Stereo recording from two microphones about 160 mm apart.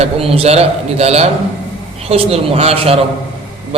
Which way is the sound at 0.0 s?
40° right (ahead or behind).